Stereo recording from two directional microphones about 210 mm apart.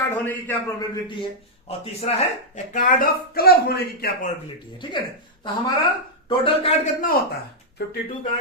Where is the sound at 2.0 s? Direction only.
30° left (ahead or behind).